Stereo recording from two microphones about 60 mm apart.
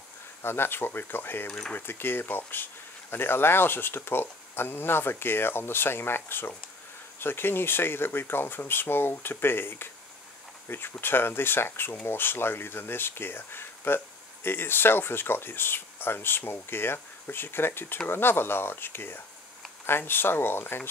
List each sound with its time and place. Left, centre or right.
0.4 s speech: left